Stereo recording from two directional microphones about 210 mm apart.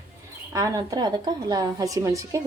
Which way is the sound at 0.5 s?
15° right (ahead or behind).